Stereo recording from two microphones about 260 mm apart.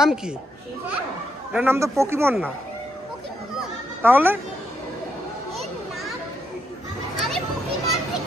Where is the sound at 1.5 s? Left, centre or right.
Centre.